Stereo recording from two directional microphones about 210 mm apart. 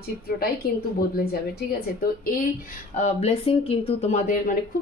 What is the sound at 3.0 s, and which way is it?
Speech, 30° left (ahead or behind).